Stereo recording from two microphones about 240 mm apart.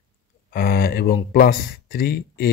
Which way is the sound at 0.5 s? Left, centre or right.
Left.